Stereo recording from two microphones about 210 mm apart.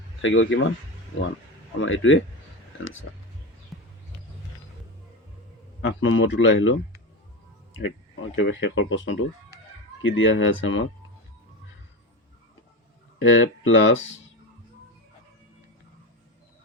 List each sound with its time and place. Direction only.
0.2 s speech: 65° left (ahead or behind)
1.8 s speech: 70° left (ahead or behind)
3.7 s a sound: centre (ahead or behind)
5.8 s speech: 65° left (ahead or behind)
7.8 s speech: 65° left (ahead or behind)
13.1 s speech: 65° left (ahead or behind)